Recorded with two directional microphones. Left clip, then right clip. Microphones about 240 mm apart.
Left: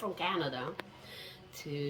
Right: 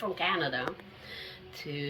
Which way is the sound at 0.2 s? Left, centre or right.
Centre.